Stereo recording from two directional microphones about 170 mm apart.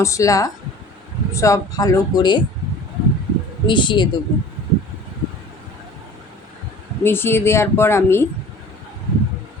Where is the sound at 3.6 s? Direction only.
30° left (ahead or behind).